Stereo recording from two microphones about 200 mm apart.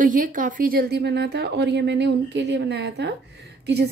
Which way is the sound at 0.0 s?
40° right (ahead or behind).